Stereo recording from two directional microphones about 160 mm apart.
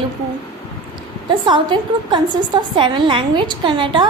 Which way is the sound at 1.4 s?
30° right (ahead or behind).